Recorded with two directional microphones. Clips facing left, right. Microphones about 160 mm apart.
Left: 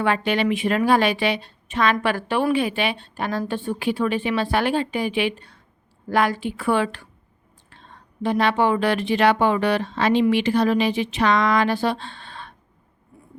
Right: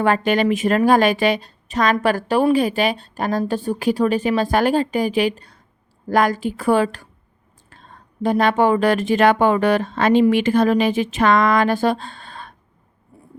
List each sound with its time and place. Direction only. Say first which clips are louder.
0.0 s a woman's voice: right 4 dB; 45° right (ahead or behind)